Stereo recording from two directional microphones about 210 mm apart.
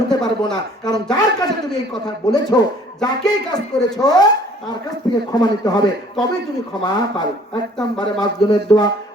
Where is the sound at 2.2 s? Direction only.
20° left (ahead or behind).